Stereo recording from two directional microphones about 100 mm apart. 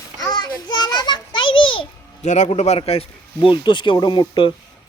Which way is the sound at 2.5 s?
85° left.